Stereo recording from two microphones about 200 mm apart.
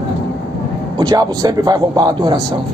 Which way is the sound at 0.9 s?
20° right (ahead or behind).